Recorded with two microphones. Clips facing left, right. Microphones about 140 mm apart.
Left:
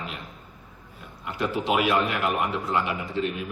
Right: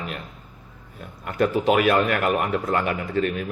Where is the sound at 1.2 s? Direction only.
50° right (ahead or behind).